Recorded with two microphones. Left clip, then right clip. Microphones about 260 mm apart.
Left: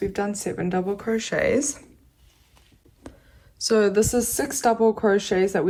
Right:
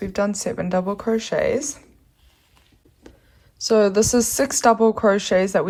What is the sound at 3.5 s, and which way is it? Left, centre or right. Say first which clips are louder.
Speech: right 3 dB; centre.